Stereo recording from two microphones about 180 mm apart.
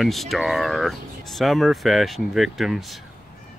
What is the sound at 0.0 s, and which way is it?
Speech, centre (ahead or behind).